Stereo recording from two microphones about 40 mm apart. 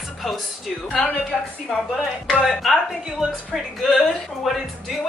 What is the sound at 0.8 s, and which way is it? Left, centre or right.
Speech, left.